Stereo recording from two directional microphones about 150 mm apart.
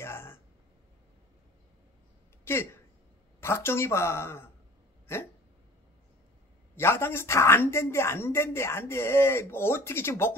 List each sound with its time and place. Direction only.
0.0 s a sound: 15° left (ahead or behind)
2.4 s speech: 15° left (ahead or behind)
5.0 s hiccup: 15° left (ahead or behind)
6.7 s speech: 15° left (ahead or behind)